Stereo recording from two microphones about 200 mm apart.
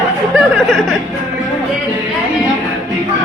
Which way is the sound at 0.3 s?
5° left (ahead or behind).